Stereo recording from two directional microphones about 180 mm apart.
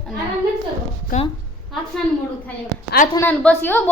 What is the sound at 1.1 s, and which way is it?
Speech, 45° left (ahead or behind).